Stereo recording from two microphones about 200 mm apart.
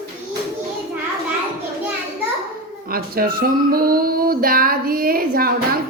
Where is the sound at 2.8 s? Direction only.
45° right (ahead or behind).